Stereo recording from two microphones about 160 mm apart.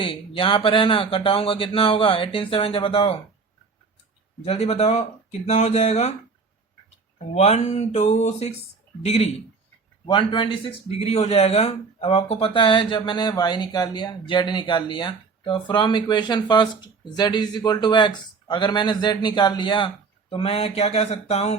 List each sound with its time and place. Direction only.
0.0 s speech: 35° left (ahead or behind)
4.4 s speech: 40° left (ahead or behind)
7.3 s speech: 45° left (ahead or behind)